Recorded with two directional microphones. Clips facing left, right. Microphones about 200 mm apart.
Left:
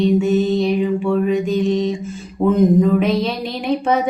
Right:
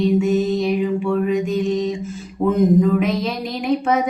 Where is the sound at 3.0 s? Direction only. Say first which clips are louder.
Left 3 dB; 30° left (ahead or behind).